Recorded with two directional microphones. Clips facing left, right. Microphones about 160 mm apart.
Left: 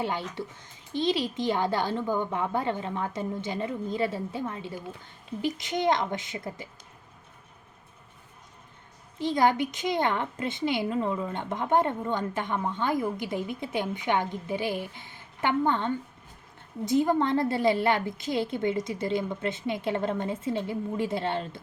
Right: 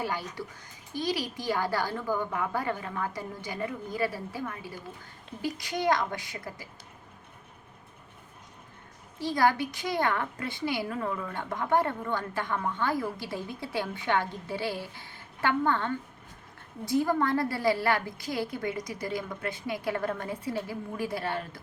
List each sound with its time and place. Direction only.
0.0 s speech: 25° left (ahead or behind)
9.1 s speech: 20° left (ahead or behind)